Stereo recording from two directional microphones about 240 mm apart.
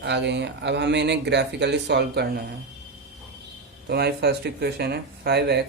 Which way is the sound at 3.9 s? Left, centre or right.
Right.